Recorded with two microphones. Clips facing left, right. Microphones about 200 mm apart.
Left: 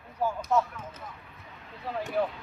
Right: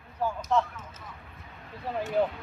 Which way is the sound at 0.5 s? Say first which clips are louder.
Even; 5° left (ahead or behind).